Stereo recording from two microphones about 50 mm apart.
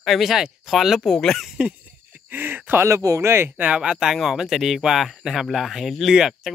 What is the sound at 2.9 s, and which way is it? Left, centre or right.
Speech, right.